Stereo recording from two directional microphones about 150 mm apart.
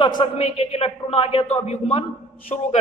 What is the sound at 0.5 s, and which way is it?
A man's voice, 45° left (ahead or behind).